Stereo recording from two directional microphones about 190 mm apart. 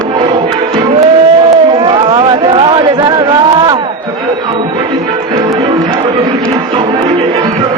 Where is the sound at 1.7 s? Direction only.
30° right (ahead or behind).